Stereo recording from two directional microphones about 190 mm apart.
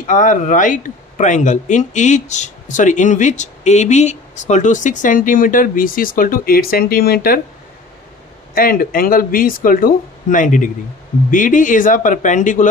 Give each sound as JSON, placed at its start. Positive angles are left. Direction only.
{"t": 0.0, "sound": "speech", "side_deg": 40}
{"t": 8.5, "sound": "speech", "side_deg": 50}